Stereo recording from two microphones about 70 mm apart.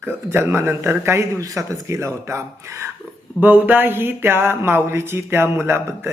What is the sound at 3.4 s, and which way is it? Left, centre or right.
Speech, right.